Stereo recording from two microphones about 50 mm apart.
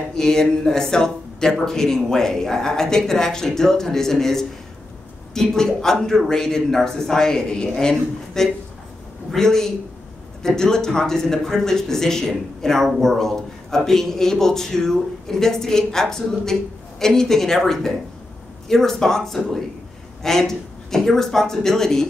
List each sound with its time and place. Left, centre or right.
0.1 s speech: centre